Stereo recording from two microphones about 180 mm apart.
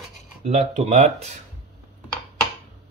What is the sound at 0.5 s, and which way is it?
Speech, 40° right (ahead or behind).